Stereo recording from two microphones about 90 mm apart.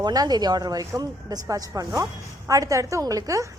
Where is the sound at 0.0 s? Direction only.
45° right (ahead or behind).